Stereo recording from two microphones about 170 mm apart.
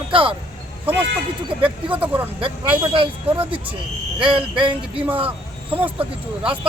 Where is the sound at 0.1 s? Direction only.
30° right (ahead or behind).